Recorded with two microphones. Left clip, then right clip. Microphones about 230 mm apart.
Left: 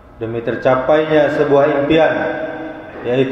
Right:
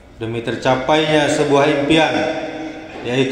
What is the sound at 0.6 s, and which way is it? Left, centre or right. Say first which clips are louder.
A man's voice: left 2 dB; right.